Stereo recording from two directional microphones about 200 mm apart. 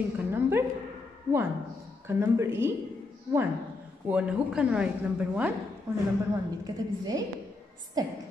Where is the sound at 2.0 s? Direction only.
10° right (ahead or behind).